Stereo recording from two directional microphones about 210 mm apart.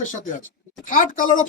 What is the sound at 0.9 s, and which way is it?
Speech, 40° left (ahead or behind).